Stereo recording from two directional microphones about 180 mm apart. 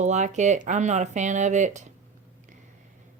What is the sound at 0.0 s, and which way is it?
Speech, 40° right (ahead or behind).